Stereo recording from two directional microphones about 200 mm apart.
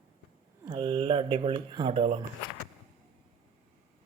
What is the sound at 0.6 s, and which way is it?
Speech, 25° right (ahead or behind).